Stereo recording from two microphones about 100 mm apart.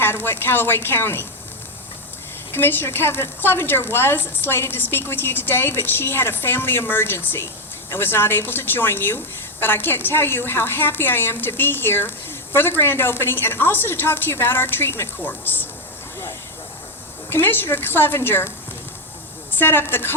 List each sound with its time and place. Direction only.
0.0 s a woman's voice: 20° left (ahead or behind)
2.5 s a woman's voice: 20° left (ahead or behind)
17.2 s a woman's voice: 20° left (ahead or behind)